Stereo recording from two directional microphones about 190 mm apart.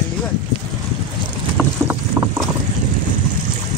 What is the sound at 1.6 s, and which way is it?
Boat, 10° right (ahead or behind).